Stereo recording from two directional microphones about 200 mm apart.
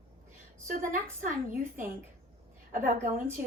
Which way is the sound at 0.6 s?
40° right (ahead or behind).